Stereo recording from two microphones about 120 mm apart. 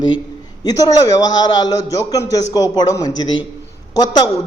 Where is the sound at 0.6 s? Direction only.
30° left (ahead or behind).